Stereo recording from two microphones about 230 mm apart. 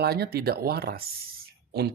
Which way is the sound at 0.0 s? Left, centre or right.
Right.